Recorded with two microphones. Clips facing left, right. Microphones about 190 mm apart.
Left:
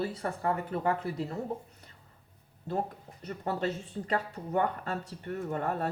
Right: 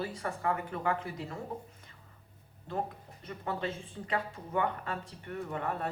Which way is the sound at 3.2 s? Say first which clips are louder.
Left 4 dB; 40° left (ahead or behind).